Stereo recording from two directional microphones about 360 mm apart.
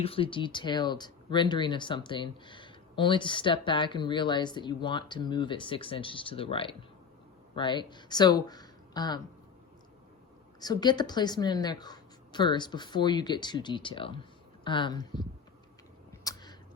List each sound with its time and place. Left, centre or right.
0.0 s speech: centre
10.6 s speech: centre
16.2 s a sound: centre